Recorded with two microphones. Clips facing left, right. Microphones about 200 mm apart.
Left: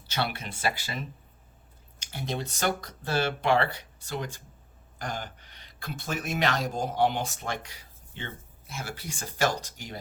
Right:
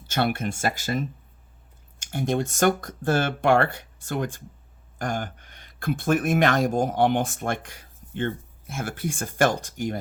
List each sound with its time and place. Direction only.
0.1 s speech: 50° right (ahead or behind)